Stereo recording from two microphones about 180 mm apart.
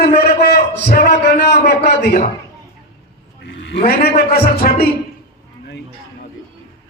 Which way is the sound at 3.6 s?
60° left (ahead or behind).